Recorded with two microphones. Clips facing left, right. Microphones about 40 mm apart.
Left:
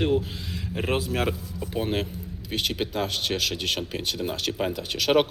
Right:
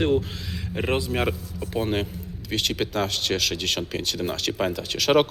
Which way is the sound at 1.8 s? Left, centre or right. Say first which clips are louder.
Right 2 dB; centre.